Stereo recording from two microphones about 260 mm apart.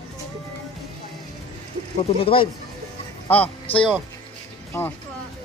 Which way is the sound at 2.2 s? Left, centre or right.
Left.